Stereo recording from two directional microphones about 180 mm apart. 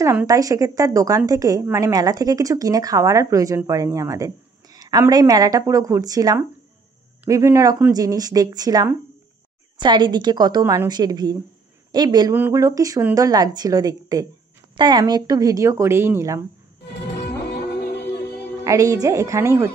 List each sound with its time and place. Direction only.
0.0 s a woman's voice: 15° right (ahead or behind)
17.2 s music: 70° left (ahead or behind)
18.6 s a woman's voice: 15° right (ahead or behind)